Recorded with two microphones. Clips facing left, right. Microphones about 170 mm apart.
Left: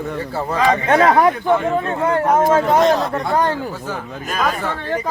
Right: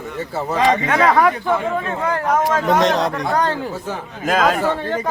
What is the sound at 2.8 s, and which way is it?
Speech, 80° right.